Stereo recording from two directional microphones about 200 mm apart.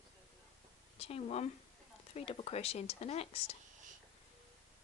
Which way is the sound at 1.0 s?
30° left (ahead or behind).